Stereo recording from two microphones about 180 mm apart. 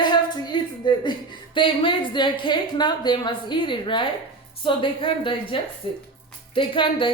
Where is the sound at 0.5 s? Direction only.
25° left (ahead or behind).